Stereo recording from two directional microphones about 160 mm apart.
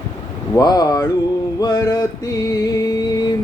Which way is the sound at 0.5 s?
25° left (ahead or behind).